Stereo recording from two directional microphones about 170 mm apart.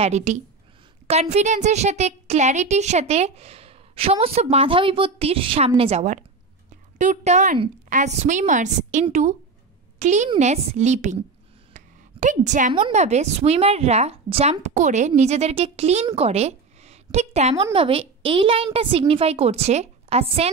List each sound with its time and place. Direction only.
0.0 s a woman's voice: 45° right (ahead or behind)
11.7 s a sound: 45° right (ahead or behind)
12.7 s speech: 40° right (ahead or behind)